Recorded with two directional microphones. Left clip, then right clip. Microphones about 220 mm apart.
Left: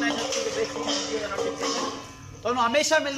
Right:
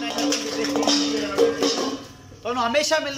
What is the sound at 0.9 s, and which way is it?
Music, 45° right (ahead or behind).